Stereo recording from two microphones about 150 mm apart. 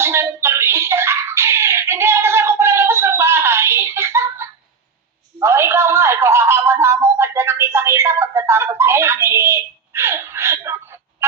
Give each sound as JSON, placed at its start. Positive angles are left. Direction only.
{"t": 0.0, "sound": "a sound", "side_deg": -15}
{"t": 5.4, "sound": "music", "side_deg": -15}
{"t": 11.2, "sound": "fowl", "side_deg": -15}